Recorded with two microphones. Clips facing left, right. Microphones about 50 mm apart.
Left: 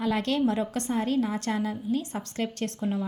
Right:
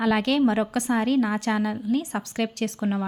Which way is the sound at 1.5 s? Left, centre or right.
Right.